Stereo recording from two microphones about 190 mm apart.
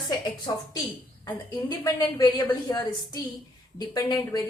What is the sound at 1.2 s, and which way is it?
A woman's voice, 20° left (ahead or behind).